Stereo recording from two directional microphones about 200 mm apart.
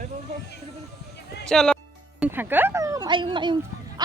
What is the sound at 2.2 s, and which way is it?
Speech, 10° right (ahead or behind).